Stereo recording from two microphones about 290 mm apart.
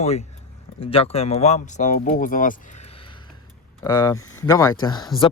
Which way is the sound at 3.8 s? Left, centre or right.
Centre.